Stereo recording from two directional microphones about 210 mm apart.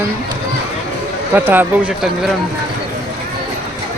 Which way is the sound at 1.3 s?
10° right (ahead or behind).